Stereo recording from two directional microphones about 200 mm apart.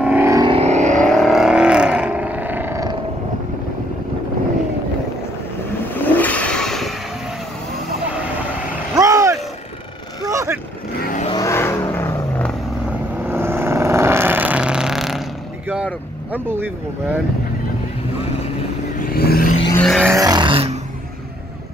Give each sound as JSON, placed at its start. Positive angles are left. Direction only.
{"t": 0.0, "sound": "vehicle", "side_deg": -10}
{"t": 0.5, "sound": "vehicle", "side_deg": -35}
{"t": 1.0, "sound": "vehicle", "side_deg": 0}
{"t": 5.9, "sound": "vehicle", "side_deg": 10}
{"t": 8.9, "sound": "vehicle", "side_deg": -15}
{"t": 11.0, "sound": "vehicle", "side_deg": 45}
{"t": 11.2, "sound": "vehicle", "side_deg": 20}
{"t": 13.2, "sound": "vehicle", "side_deg": -10}
{"t": 19.1, "sound": "vehicle", "side_deg": 50}
{"t": 19.7, "sound": "vehicle", "side_deg": 5}
{"t": 20.1, "sound": "a sound", "side_deg": -20}